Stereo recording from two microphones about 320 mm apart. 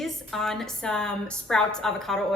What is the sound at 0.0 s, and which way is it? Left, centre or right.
A woman's voice, centre.